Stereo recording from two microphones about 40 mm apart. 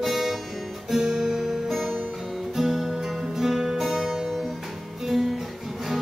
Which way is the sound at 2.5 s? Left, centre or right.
Centre.